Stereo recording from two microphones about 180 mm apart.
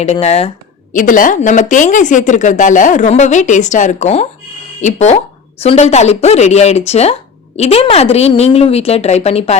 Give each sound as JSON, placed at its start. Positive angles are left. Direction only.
{"t": 0.0, "sound": "a woman's voice", "side_deg": 35}
{"t": 0.9, "sound": "a woman's voice", "side_deg": 45}